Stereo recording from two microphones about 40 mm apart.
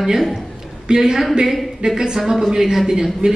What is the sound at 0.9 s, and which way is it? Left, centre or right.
A woman's voice, centre.